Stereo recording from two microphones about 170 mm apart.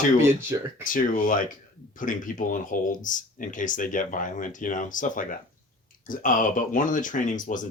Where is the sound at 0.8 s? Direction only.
50° left (ahead or behind).